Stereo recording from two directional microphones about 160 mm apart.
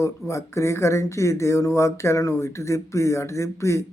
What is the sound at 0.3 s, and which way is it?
Speech, 20° left (ahead or behind).